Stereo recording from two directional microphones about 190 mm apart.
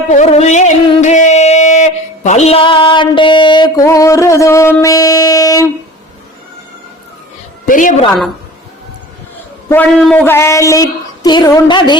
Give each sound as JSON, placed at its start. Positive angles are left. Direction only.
{"t": 0.2, "sound": "music", "side_deg": 40}
{"t": 7.6, "sound": "a man's voice", "side_deg": 45}
{"t": 9.6, "sound": "a woman's voice", "side_deg": 5}